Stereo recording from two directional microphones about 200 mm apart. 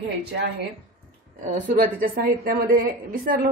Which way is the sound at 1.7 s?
45° right (ahead or behind).